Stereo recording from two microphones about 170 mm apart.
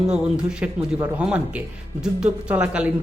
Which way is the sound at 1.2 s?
5° right (ahead or behind).